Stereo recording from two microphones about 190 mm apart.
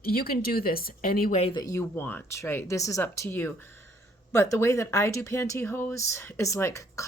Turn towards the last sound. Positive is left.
turn(degrees=15)  # may be behind; listen again after turning